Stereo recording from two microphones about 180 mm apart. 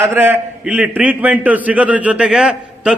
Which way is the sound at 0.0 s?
15° right (ahead or behind).